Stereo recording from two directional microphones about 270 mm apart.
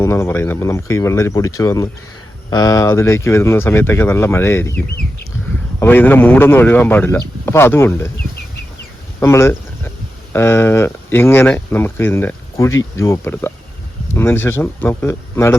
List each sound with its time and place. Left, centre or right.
0.0 s speech: centre
5.8 s speech: centre
9.2 s speech: centre